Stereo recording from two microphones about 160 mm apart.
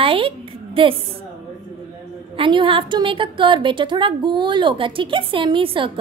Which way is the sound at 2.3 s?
30° right (ahead or behind).